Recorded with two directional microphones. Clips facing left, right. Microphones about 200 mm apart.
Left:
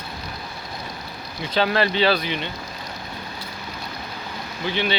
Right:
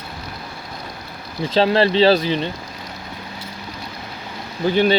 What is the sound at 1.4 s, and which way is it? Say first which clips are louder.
Speech: right 5 dB; 30° right (ahead or behind).